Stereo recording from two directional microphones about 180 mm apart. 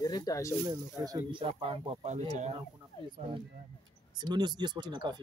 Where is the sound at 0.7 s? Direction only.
25° right (ahead or behind); by 2.6 s 40° right (ahead or behind).